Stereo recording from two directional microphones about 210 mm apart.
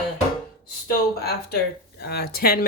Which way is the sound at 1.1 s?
50° left (ahead or behind).